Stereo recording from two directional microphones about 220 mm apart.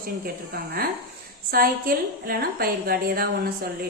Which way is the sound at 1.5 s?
45° right (ahead or behind).